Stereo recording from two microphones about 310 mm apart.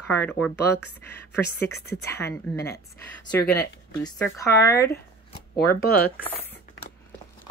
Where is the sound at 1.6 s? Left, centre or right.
Centre.